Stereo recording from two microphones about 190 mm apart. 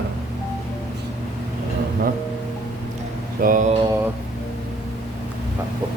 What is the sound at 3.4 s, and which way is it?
Mantra, 45° right (ahead or behind).